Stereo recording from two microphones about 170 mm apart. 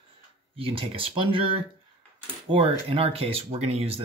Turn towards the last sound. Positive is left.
turn(degrees=-35)  # may be behind; listen again after turning